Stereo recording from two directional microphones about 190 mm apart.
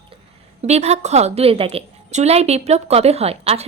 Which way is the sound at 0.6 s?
35° right (ahead or behind).